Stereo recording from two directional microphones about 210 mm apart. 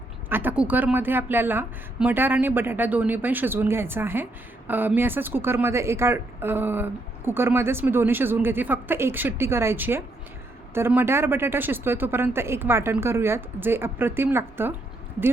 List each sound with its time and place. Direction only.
0.3 s a woman's voice: 10° right (ahead or behind)